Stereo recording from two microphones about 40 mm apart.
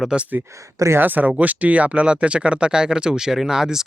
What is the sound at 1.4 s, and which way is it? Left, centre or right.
Speech, right.